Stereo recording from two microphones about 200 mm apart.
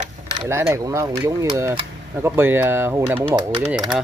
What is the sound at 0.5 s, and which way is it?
Speech, 15° right (ahead or behind).